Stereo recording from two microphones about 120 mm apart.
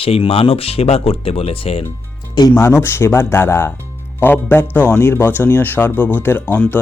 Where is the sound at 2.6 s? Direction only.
20° left (ahead or behind).